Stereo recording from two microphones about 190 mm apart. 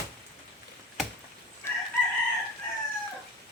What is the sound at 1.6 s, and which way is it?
Chicken, 15° left (ahead or behind).